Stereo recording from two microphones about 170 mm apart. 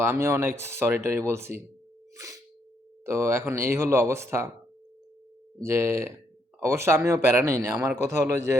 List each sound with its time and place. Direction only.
0.0 s a man's voice: 15° right (ahead or behind)
2.2 s sneeze: 20° right (ahead or behind)
3.1 s a man's voice: 15° right (ahead or behind)
5.5 s a man's voice: 15° right (ahead or behind)